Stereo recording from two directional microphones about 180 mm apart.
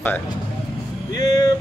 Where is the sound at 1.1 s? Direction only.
20° left (ahead or behind).